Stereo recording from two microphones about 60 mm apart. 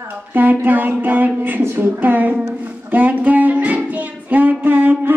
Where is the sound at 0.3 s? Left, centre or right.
Right.